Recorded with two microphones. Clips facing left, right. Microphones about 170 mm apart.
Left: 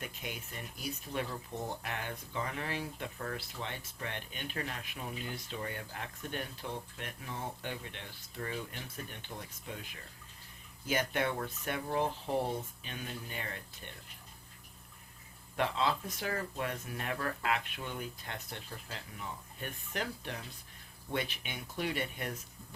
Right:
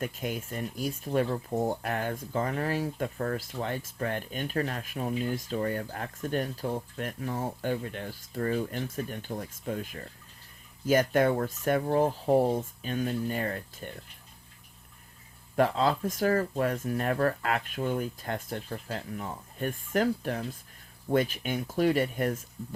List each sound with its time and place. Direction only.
0.0 s speech: 45° right (ahead or behind)
15.5 s speech: 45° right (ahead or behind)